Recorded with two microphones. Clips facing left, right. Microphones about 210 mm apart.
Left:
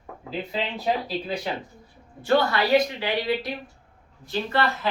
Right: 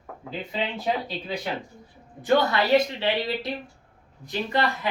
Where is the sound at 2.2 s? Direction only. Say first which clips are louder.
Even; 20° right (ahead or behind).